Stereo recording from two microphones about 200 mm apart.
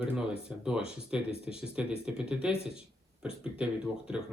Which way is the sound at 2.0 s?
5° right (ahead or behind).